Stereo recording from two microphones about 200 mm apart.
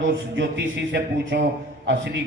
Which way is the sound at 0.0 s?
65° right (ahead or behind).